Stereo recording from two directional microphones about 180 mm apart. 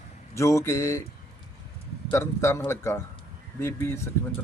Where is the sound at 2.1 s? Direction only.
15° left (ahead or behind).